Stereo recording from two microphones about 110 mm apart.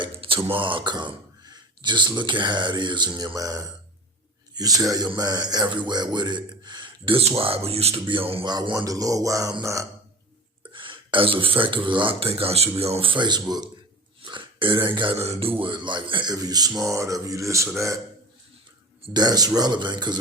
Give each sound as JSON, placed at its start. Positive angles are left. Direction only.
{"t": 0.0, "sound": "speech", "side_deg": -50}
{"t": 8.0, "sound": "speech", "side_deg": -55}
{"t": 8.4, "sound": "speech", "side_deg": -40}
{"t": 10.7, "sound": "speech", "side_deg": -50}
{"t": 14.2, "sound": "a sound", "side_deg": -50}
{"t": 15.2, "sound": "speech", "side_deg": -65}
{"t": 16.3, "sound": "a man's voice", "side_deg": -35}
{"t": 19.1, "sound": "speech", "side_deg": -35}